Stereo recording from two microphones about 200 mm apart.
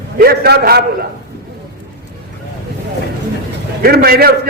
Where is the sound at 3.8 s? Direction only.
50° right (ahead or behind).